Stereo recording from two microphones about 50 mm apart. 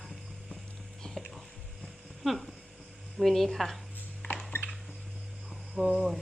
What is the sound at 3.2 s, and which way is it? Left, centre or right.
Speech, centre.